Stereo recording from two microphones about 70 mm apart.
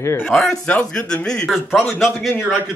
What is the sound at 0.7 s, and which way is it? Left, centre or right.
Speech, centre.